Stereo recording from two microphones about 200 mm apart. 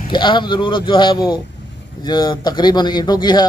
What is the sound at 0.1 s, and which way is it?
Speech, 25° left (ahead or behind).